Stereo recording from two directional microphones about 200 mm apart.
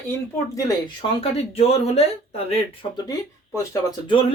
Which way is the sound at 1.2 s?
30° left (ahead or behind).